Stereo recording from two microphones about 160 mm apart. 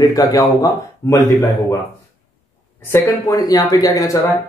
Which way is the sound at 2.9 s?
15° left (ahead or behind).